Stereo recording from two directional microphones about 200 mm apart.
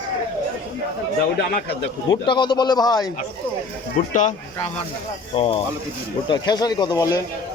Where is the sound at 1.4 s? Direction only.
55° left (ahead or behind).